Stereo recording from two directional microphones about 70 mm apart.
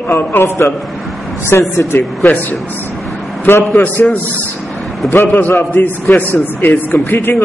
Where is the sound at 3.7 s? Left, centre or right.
Left.